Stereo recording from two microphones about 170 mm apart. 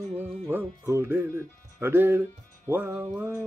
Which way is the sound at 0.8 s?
15° right (ahead or behind).